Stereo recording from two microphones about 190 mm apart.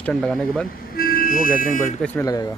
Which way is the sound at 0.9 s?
50° left (ahead or behind).